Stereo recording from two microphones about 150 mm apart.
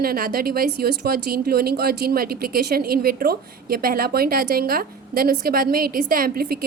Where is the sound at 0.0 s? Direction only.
85° right.